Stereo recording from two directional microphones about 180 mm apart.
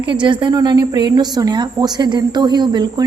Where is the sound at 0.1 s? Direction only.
25° right (ahead or behind).